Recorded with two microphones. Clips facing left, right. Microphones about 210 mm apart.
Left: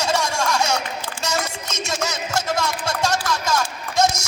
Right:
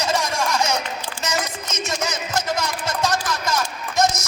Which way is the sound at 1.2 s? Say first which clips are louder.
Even; 15° right (ahead or behind).